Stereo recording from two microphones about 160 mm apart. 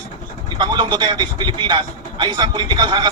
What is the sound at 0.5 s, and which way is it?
A man's voice, 30° right (ahead or behind).